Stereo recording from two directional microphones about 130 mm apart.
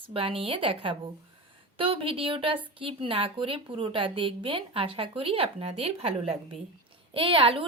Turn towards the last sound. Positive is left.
turn(degrees=-40)  # may be behind; listen again after turning